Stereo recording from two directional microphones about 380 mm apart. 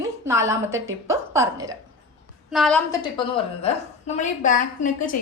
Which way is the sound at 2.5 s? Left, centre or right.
Centre.